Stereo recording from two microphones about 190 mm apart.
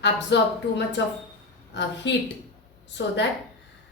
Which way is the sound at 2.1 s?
65° left (ahead or behind).